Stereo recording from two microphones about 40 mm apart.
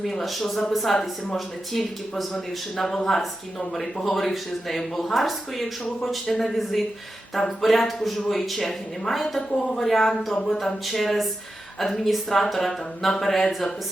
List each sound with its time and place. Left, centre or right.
0.0 s speech: centre